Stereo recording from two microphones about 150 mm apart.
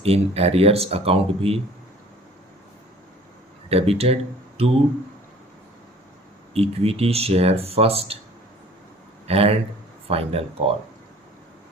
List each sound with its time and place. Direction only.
0.0 s speech: 40° right (ahead or behind)
3.7 s speech: 40° right (ahead or behind)
6.5 s speech: 40° right (ahead or behind)
9.2 s speech: 40° right (ahead or behind)